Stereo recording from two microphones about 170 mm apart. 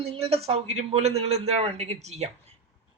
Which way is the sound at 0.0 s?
35° right (ahead or behind).